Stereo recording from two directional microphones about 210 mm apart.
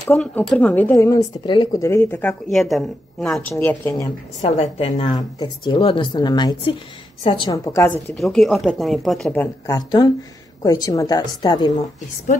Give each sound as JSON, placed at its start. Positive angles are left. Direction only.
{"t": 0.0, "sound": "speech", "side_deg": 5}
{"t": 4.4, "sound": "speech", "side_deg": 30}
{"t": 8.1, "sound": "speech", "side_deg": 0}